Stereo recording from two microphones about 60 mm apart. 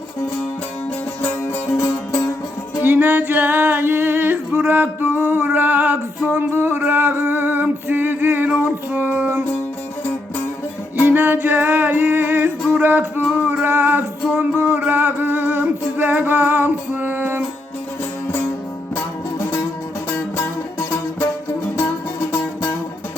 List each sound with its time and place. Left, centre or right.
2.8 s a sound: right
8.5 s music: right
11.0 s music: right
13.2 s singing: right
13.7 s music: right
14.8 s a sound: right
16.9 s music: right
20.1 s music: left